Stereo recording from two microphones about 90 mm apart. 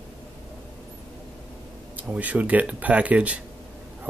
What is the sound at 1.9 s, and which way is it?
Speech, 15° right (ahead or behind).